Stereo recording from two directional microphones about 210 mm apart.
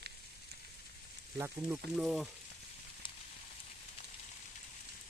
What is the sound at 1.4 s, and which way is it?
Speech, 10° right (ahead or behind).